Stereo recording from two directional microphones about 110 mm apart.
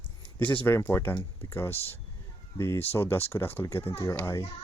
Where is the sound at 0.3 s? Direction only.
20° left (ahead or behind).